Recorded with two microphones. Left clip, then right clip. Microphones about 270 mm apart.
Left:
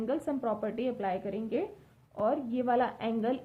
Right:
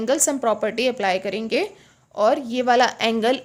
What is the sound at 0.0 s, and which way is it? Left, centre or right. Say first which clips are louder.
A woman's voice: right 12 dB; right.